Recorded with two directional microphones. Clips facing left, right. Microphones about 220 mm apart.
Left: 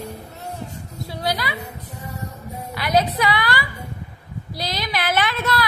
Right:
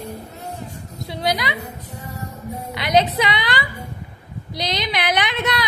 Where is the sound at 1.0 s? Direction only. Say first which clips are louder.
Right 3 dB; 20° right (ahead or behind).